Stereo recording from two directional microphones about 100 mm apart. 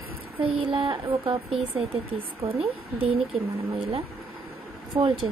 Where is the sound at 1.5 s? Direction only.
70° right (ahead or behind).